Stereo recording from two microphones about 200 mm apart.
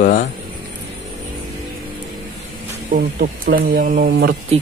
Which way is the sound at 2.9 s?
45° right (ahead or behind).